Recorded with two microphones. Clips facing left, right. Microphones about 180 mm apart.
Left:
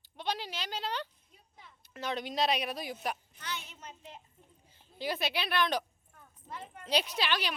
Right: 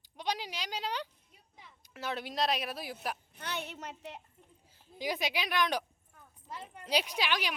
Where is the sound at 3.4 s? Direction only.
60° right (ahead or behind).